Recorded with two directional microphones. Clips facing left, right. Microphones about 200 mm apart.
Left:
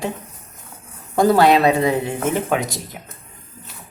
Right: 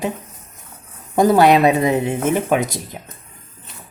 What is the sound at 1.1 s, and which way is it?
Speech, 15° right (ahead or behind).